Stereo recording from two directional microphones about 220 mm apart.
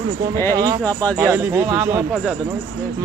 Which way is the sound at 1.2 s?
10° right (ahead or behind).